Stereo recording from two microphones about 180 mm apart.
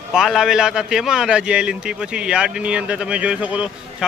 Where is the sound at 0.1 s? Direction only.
Centre (ahead or behind).